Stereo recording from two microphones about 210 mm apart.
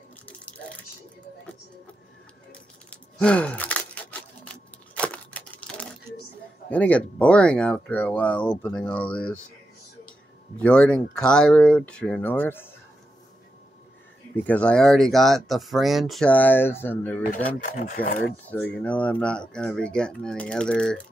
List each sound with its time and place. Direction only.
2.5 s a sound: 5° left (ahead or behind)
6.7 s speech: 5° left (ahead or behind)
10.6 s speech: 5° left (ahead or behind)
14.3 s speech: 5° left (ahead or behind)
17.6 s speech: 40° left (ahead or behind)
18.3 s speech: 5° left (ahead or behind)